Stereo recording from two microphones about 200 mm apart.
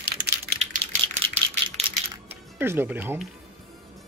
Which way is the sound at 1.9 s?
30° right (ahead or behind).